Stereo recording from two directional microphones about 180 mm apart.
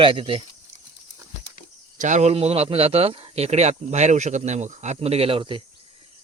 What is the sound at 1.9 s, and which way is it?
A man's voice, 40° right (ahead or behind).